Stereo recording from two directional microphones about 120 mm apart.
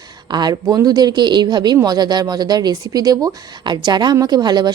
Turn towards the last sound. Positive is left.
turn(degrees=-35)  # may be behind; listen again after turning